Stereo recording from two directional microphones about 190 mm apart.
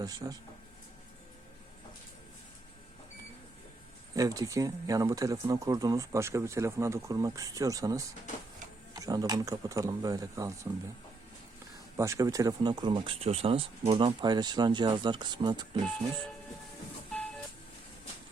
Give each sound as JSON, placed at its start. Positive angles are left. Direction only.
{"t": 0.0, "sound": "speech", "side_deg": -20}
{"t": 4.1, "sound": "speech", "side_deg": -20}
{"t": 11.9, "sound": "speech", "side_deg": -15}